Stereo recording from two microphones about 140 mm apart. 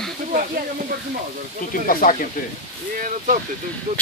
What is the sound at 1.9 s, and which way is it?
Speech, 90° left.